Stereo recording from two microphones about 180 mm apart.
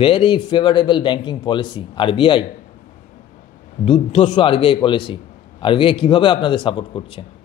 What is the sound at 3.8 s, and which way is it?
A man's voice, 30° left (ahead or behind).